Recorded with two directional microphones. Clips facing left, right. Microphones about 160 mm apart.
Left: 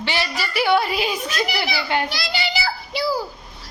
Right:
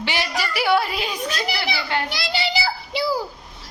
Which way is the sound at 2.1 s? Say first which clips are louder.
Right 1 dB; 25° right (ahead or behind).